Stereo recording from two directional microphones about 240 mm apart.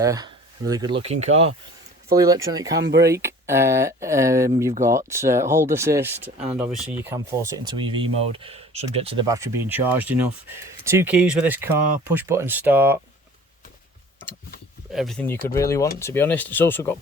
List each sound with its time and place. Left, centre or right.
0.0 s speech: centre
2.2 s speech: centre
2.8 s speech: right
3.1 s speech: centre
14.9 s speech: centre